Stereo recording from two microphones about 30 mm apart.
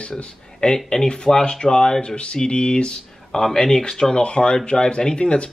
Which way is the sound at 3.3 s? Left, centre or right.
Centre.